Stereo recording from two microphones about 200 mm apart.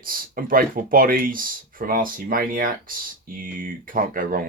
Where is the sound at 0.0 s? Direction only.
45° right (ahead or behind).